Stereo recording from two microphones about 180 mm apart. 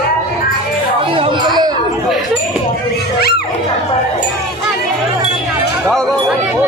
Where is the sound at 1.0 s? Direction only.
30° right (ahead or behind).